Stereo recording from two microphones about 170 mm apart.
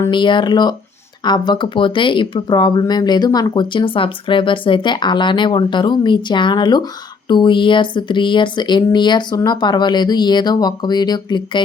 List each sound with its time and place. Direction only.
0.1 s speech: 30° left (ahead or behind)